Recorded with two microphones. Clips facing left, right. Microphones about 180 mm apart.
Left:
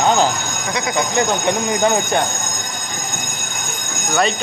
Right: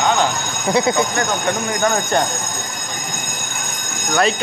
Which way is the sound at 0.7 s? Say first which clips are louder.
Right 8 dB; 30° right (ahead or behind).